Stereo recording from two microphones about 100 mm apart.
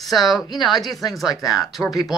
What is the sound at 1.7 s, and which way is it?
Speech, centre (ahead or behind).